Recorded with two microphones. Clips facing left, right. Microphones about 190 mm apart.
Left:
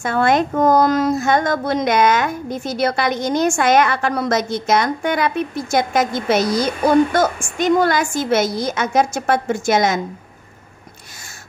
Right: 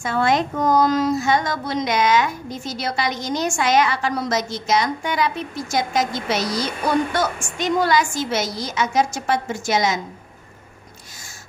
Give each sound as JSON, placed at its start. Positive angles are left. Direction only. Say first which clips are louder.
{"t": 0.0, "sound": "a woman's voice", "louder": "left 3 dB", "side_deg": 55}